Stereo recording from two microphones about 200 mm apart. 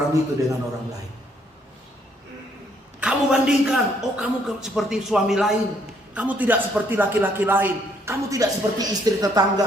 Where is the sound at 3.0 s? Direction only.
5° right (ahead or behind).